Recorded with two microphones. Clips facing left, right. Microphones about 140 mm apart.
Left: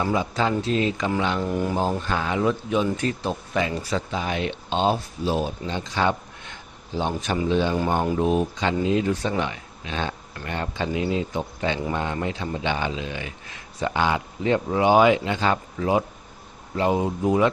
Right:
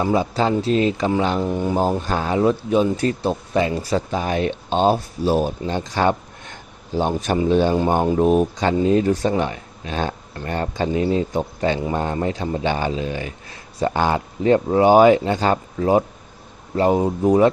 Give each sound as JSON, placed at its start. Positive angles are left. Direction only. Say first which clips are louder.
{"t": 0.0, "sound": "speech", "louder": "right 4 dB", "side_deg": -35}
{"t": 1.4, "sound": "speech", "louder": "right 3 dB", "side_deg": -25}
{"t": 2.0, "sound": "speech", "louder": "right 4 dB", "side_deg": -35}